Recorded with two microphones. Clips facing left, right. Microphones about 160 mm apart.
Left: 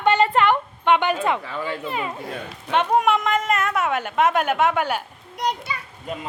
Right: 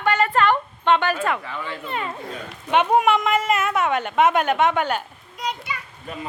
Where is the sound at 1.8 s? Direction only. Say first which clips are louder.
Left 1 dB; 5° left (ahead or behind).